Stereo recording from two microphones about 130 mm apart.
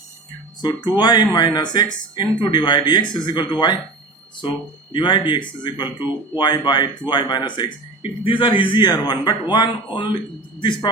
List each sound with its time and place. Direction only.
0.9 s speech: 30° left (ahead or behind)
4.9 s speech: 40° left (ahead or behind)